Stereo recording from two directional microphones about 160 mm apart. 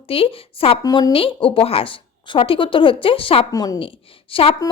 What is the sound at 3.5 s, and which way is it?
Speech, 25° left (ahead or behind).